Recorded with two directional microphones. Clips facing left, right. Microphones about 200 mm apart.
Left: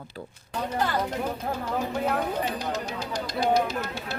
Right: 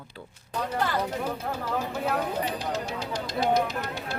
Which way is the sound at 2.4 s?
30° right (ahead or behind).